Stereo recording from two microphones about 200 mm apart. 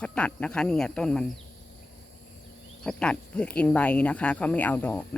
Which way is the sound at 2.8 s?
5° left (ahead or behind).